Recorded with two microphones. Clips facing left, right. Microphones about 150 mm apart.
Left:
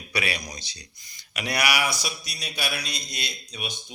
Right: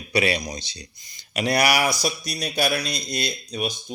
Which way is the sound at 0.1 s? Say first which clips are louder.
Right 8 dB; 25° right (ahead or behind).